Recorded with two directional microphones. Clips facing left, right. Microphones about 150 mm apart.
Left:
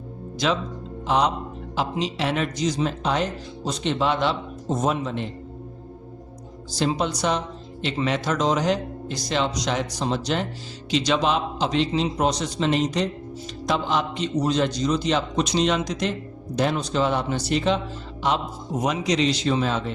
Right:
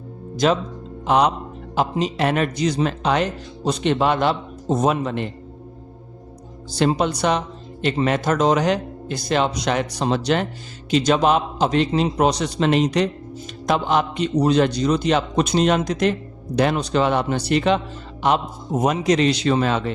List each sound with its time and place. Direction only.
0.4 s a man's voice: 45° right (ahead or behind)
1.0 s speech: 60° right (ahead or behind)
1.7 s speech: 50° right (ahead or behind); by 5.3 s 65° right (ahead or behind)
6.7 s speech: 60° right (ahead or behind)
10.9 s a man's voice: 50° right (ahead or behind); by 19.9 s 70° right (ahead or behind)